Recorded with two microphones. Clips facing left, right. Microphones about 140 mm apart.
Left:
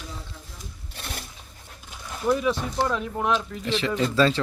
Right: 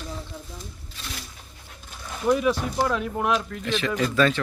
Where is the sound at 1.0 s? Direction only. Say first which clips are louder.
Left 2 dB; 55° left (ahead or behind).